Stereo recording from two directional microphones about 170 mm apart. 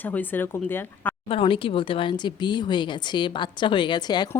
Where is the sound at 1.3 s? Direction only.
30° left (ahead or behind).